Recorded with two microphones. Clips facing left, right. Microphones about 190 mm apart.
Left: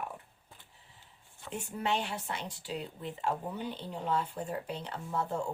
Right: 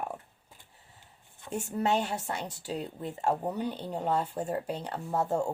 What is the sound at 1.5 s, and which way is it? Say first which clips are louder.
Speech: right 5 dB; 40° right (ahead or behind).